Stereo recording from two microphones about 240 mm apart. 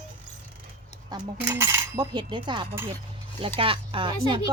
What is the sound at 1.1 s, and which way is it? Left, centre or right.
Speech, centre.